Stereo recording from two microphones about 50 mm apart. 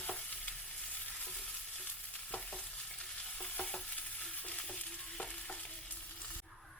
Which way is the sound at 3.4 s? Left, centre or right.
Centre.